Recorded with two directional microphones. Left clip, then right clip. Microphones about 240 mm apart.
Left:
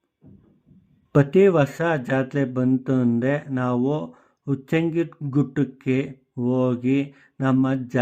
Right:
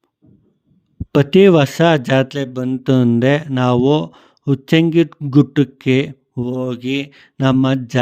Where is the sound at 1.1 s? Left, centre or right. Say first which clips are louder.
Right 6 dB; right.